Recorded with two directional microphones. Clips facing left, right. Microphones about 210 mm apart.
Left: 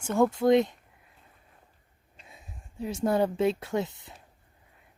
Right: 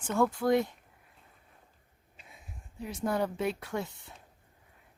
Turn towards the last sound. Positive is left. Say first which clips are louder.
# left 6 dB
turn(degrees=20)  # may be behind; listen again after turning